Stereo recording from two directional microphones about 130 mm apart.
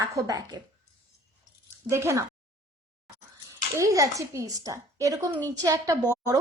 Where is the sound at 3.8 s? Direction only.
25° right (ahead or behind).